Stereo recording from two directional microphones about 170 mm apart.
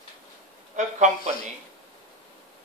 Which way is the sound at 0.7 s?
45° right (ahead or behind).